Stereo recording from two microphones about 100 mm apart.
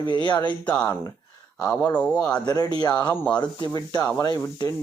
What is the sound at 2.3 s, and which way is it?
Speech, 40° left (ahead or behind).